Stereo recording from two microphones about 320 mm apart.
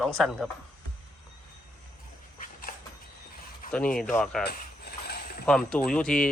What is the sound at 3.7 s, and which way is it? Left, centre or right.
Speech, centre.